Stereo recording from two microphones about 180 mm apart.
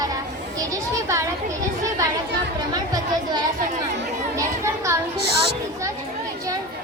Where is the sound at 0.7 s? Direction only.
15° right (ahead or behind).